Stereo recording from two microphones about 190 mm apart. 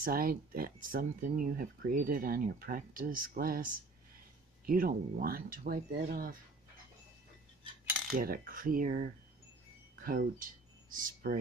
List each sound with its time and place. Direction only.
0.0 s speech: 50° right (ahead or behind)
8.1 s speech: 50° right (ahead or behind)
10.0 s speech: 50° right (ahead or behind)